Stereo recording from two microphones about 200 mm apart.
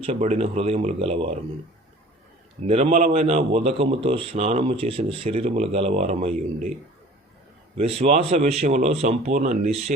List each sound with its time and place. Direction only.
0.0 s speech: 30° right (ahead or behind)
2.6 s a man's voice: 30° right (ahead or behind)
7.8 s a man's voice: 30° right (ahead or behind)